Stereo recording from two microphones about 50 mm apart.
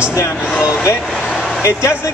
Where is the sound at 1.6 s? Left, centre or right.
Left.